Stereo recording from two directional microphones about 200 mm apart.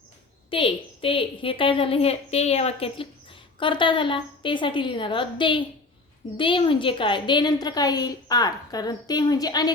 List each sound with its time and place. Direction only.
0.5 s a woman's voice: 25° left (ahead or behind)